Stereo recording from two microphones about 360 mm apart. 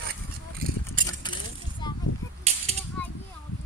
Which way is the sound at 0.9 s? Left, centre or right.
Centre.